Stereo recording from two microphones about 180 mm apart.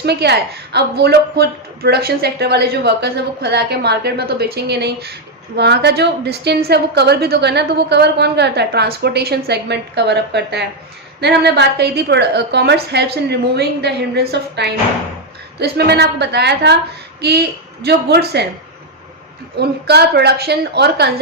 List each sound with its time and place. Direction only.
0.0 s a woman's voice: 65° right (ahead or behind)
19.5 s a woman's voice: 65° right (ahead or behind)